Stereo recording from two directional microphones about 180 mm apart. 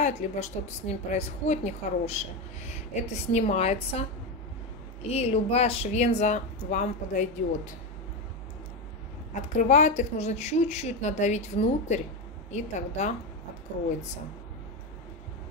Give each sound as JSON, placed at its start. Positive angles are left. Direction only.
{"t": 0.0, "sound": "a woman's voice", "side_deg": 40}
{"t": 5.1, "sound": "a woman's voice", "side_deg": 35}
{"t": 9.3, "sound": "a woman's voice", "side_deg": 40}